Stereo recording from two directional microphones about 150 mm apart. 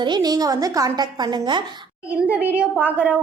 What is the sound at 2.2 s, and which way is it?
Speech, 10° right (ahead or behind).